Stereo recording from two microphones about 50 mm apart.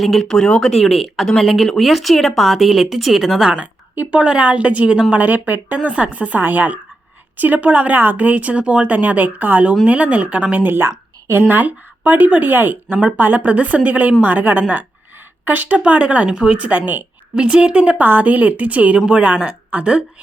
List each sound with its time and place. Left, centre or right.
0.0 s speech: centre
0.3 s speech: centre
0.6 s speech: centre
3.4 s a woman's voice: right
10.7 s a woman's voice: right
11.4 s speech: right
15.8 s a woman's voice: right
17.3 s a woman's voice: right
18.0 s speech: right
18.9 s a woman's voice: centre